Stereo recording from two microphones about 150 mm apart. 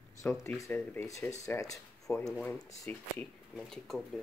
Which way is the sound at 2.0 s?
5° left (ahead or behind).